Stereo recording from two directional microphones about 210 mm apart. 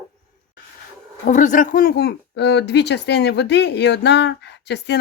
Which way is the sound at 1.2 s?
35° left (ahead or behind).